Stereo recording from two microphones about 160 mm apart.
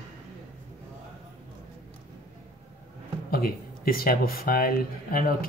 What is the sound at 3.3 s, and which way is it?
Speech, 65° left (ahead or behind).